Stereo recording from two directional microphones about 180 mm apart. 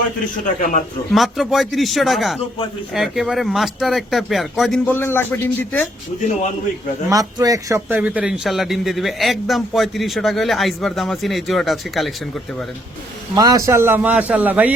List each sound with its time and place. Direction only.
0.4 s a man's voice: 45° left (ahead or behind)
1.1 s a man's voice: centre (ahead or behind)
4.9 s a man's voice: 10° left (ahead or behind)
7.1 s a man's voice: 20° right (ahead or behind); by 12.6 s centre (ahead or behind)
13.3 s a man's voice: 20° right (ahead or behind)